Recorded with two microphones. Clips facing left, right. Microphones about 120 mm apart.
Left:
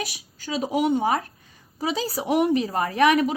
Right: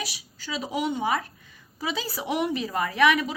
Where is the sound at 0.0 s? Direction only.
50° left (ahead or behind).